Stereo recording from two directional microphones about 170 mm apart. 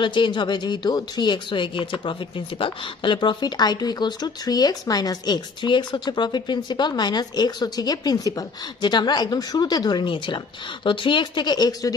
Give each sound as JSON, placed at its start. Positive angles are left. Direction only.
{"t": 0.0, "sound": "speech", "side_deg": 30}